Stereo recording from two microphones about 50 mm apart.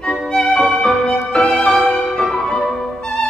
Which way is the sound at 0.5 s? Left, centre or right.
Centre.